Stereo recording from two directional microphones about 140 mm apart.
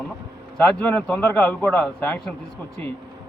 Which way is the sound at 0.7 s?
10° left (ahead or behind).